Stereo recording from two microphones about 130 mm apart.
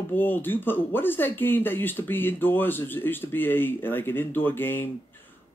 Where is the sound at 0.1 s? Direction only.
15° left (ahead or behind).